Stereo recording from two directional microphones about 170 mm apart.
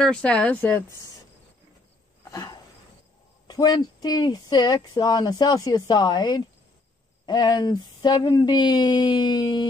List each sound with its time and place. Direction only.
0.0 s speech: 5° left (ahead or behind)
2.3 s a sound: 20° left (ahead or behind)
3.4 s speech: 25° left (ahead or behind)